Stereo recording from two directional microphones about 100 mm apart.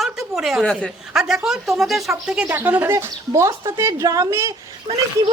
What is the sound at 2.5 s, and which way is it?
Speech, 20° right (ahead or behind).